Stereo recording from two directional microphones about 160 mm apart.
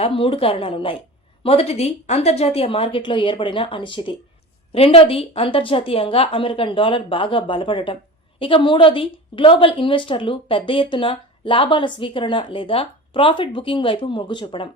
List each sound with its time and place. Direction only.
0.0 s a woman's voice: 35° left (ahead or behind)